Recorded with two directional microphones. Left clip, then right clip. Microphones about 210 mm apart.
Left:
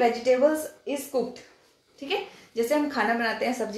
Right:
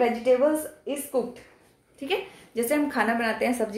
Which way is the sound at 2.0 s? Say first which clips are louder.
Right 1 dB; 25° right (ahead or behind).